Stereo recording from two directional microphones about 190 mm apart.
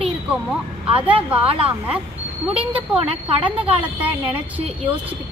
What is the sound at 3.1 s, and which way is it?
Speech, 30° right (ahead or behind).